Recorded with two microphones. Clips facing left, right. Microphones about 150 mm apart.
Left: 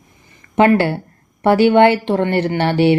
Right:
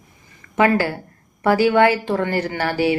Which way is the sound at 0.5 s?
25° left (ahead or behind).